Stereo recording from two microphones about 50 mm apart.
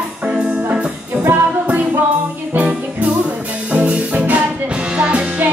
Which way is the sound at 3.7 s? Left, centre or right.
Right.